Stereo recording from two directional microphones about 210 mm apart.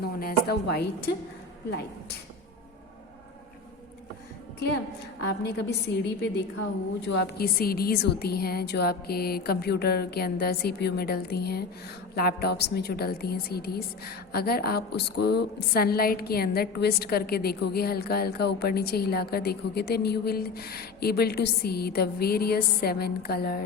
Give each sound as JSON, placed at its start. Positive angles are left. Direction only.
{"t": 0.0, "sound": "a woman's voice", "side_deg": 45}
{"t": 5.2, "sound": "a woman's voice", "side_deg": 50}